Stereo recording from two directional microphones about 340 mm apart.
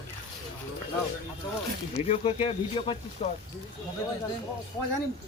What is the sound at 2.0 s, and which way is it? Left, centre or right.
Speech, centre.